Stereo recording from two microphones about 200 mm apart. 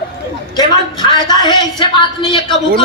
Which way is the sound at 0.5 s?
20° left (ahead or behind).